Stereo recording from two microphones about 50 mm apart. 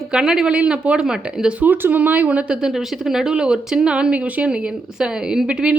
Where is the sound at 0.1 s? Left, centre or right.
Centre.